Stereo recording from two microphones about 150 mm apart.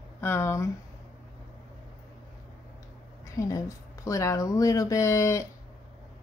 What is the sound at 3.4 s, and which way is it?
Speech, 20° left (ahead or behind).